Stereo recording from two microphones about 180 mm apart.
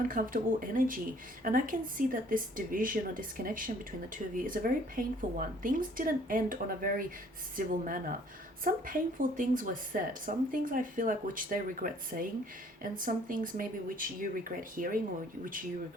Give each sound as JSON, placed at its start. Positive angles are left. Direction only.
{"t": 0.0, "sound": "speech", "side_deg": -50}